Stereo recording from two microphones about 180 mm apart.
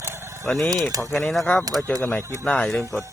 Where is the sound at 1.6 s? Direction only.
20° right (ahead or behind).